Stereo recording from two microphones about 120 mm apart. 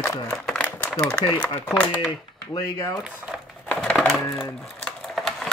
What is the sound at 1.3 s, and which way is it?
Speech, 10° left (ahead or behind).